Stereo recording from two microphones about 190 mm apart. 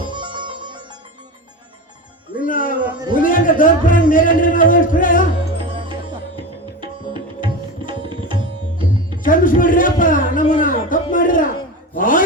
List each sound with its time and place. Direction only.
0.1 s music: 25° right (ahead or behind)
2.4 s music: 45° left (ahead or behind)
3.2 s a sound: 45° left (ahead or behind)
6.8 s music: 25° right (ahead or behind)
9.2 s a sound: 45° left (ahead or behind)
11.9 s chopping: 45° left (ahead or behind)